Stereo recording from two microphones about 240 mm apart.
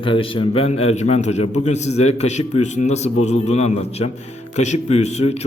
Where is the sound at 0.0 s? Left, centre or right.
Left.